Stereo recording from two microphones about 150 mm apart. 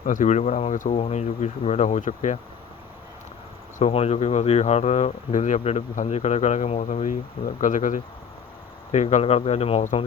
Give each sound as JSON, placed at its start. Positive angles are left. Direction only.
{"t": 0.0, "sound": "speech", "side_deg": 55}
{"t": 3.8, "sound": "speech", "side_deg": 45}